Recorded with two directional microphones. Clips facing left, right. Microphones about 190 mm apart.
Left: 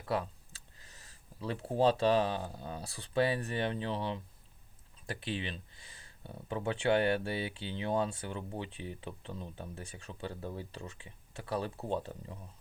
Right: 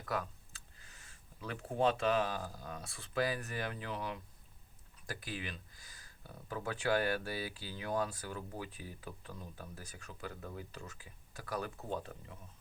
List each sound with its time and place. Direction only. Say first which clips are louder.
0.0 s speech: left 4 dB; 30° left (ahead or behind)